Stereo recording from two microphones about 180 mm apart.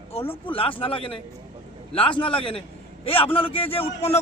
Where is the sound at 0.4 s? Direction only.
30° left (ahead or behind).